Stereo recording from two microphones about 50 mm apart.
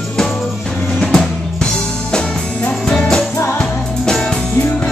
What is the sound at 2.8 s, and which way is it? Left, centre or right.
Music, centre.